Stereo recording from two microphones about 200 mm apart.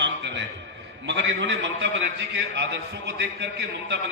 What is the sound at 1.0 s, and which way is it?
A man's voice, 65° right (ahead or behind).